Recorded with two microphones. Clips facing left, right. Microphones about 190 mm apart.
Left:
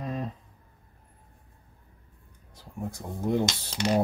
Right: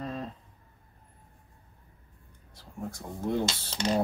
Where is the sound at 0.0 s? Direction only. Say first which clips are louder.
Left 2 dB; 15° left (ahead or behind).